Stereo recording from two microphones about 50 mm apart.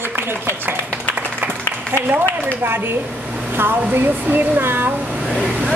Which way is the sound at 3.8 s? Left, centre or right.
Right.